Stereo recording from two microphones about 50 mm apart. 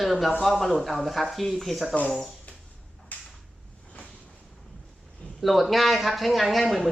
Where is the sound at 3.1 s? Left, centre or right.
Left.